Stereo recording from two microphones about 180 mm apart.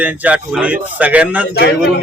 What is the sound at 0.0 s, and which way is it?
A man's voice, 10° right (ahead or behind).